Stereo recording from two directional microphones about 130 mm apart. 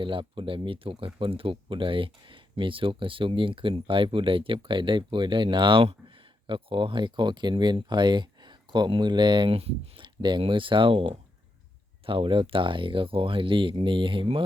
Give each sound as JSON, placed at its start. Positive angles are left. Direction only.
{"t": 0.0, "sound": "speech", "side_deg": -40}
{"t": 10.2, "sound": "speech", "side_deg": -35}